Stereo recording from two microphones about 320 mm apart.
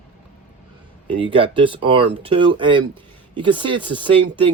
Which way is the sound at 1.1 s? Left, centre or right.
Centre.